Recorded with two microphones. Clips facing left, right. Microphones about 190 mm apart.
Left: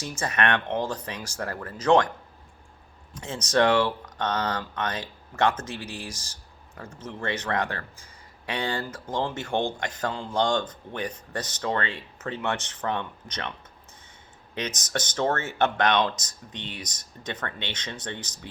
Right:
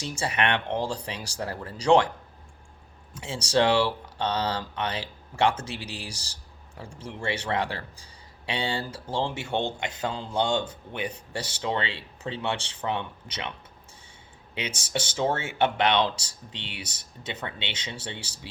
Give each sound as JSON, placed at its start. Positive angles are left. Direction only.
{"t": 0.0, "sound": "speech", "side_deg": -15}
{"t": 3.2, "sound": "speech", "side_deg": -10}
{"t": 9.5, "sound": "speech", "side_deg": -20}
{"t": 10.0, "sound": "speech", "side_deg": -10}
{"t": 14.5, "sound": "speech", "side_deg": -10}
{"t": 17.2, "sound": "speech", "side_deg": -10}